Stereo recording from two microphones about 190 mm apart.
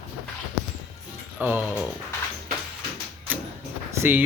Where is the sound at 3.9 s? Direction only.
10° right (ahead or behind).